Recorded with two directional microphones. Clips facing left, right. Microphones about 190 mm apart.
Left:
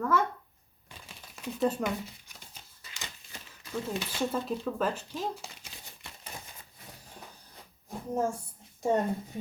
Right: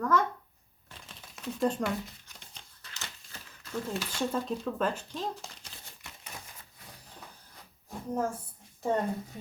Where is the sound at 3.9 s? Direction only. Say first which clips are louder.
Left 1 dB; 20° left (ahead or behind).